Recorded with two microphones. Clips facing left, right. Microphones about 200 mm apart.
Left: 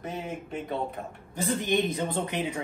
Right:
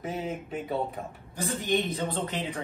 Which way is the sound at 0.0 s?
5° right (ahead or behind).